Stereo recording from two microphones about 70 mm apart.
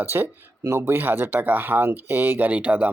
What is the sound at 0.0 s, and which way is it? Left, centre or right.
Speech, right.